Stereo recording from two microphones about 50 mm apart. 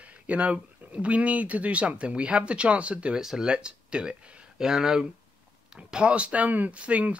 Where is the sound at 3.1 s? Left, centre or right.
Centre.